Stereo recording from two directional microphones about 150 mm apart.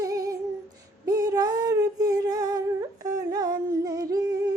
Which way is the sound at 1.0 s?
25° right (ahead or behind).